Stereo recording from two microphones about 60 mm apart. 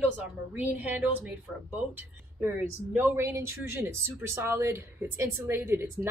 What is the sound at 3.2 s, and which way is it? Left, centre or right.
Speech, right.